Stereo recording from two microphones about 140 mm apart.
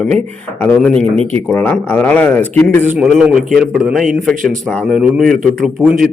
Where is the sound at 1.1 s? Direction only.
45° right (ahead or behind).